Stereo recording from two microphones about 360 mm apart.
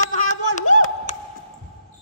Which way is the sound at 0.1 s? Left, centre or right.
Centre.